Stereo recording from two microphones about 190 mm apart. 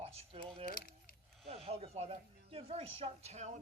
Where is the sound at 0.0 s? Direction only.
30° right (ahead or behind).